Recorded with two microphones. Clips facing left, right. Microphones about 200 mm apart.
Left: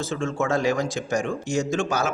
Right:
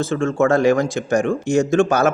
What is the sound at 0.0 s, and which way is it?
Speech, 55° right (ahead or behind).